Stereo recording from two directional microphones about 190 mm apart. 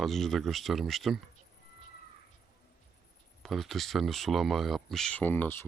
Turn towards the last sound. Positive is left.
turn(degrees=10)  # may be behind; listen again after turning